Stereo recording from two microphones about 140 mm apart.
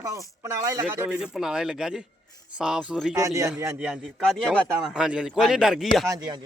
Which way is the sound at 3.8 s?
5° right (ahead or behind).